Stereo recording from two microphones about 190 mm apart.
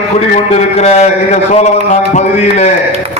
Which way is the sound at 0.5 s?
35° left (ahead or behind).